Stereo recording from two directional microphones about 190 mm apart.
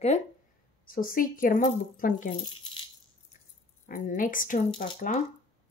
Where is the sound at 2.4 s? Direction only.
25° left (ahead or behind).